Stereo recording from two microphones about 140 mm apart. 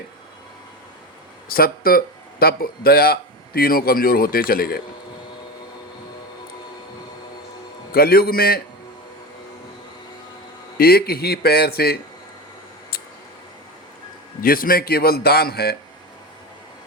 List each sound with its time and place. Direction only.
1.5 s speech: 90° left
7.9 s speech: 90° left
10.8 s speech: 90° left
14.4 s speech: 90° left